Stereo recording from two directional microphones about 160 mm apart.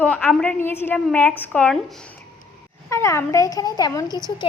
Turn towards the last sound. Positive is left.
turn(degrees=25)  # may be behind; listen again after turning